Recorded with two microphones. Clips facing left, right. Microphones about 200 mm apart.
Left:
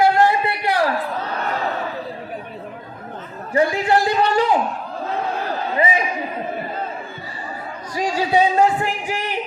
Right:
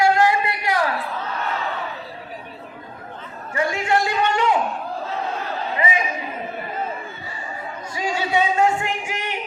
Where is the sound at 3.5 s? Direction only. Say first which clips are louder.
Left 4 dB; 35° left (ahead or behind).